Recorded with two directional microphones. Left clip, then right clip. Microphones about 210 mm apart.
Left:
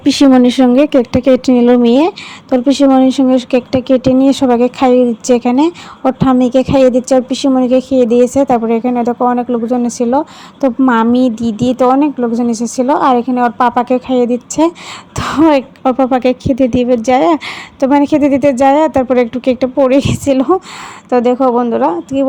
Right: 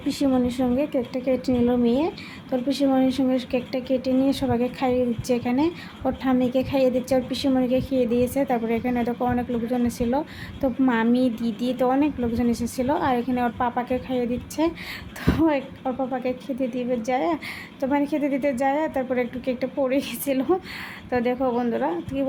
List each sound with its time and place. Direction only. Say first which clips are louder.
0.0 s speech: left 15 dB; 40° left (ahead or behind)